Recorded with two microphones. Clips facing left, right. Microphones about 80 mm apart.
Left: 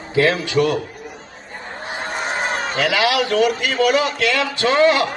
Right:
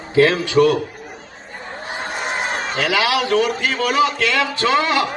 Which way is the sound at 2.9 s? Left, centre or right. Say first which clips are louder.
Right 1 dB; right.